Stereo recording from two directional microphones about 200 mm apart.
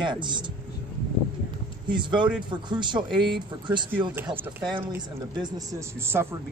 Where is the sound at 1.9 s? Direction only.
25° right (ahead or behind).